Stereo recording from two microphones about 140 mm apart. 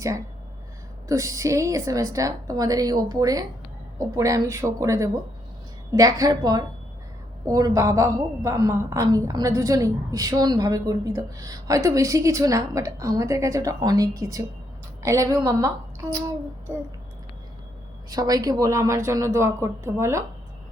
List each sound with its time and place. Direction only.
1.0 s a woman's voice: 20° right (ahead or behind)
18.1 s a woman's voice: 25° right (ahead or behind)